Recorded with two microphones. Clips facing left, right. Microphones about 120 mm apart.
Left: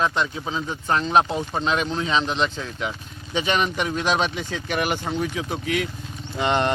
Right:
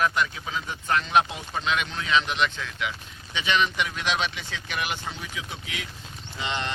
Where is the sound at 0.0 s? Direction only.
30° left (ahead or behind).